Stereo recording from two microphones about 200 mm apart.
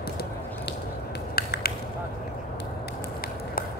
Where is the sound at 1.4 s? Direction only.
50° left (ahead or behind).